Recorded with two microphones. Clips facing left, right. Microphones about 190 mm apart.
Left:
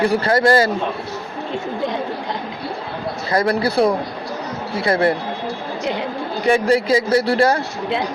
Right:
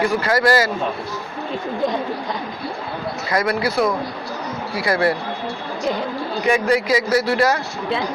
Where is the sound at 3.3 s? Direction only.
30° left (ahead or behind).